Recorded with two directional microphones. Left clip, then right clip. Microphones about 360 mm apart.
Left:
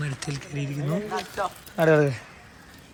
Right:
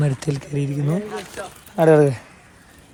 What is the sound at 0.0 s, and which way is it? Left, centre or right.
Speech, centre.